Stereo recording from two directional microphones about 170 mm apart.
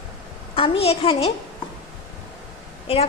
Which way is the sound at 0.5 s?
35° left (ahead or behind).